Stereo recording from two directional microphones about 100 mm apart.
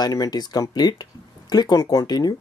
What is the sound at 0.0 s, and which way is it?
Speech, 45° left (ahead or behind).